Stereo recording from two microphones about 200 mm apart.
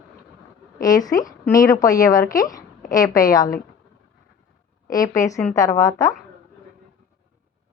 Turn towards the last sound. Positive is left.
turn(degrees=15)  # may be behind; listen again after turning